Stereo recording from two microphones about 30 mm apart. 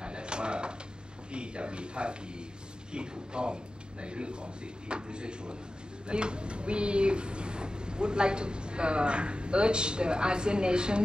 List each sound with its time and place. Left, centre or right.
0.0 s bird: right
1.3 s speech: right